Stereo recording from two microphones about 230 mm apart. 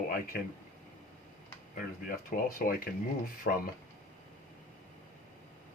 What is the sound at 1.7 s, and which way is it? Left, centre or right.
Speech, left.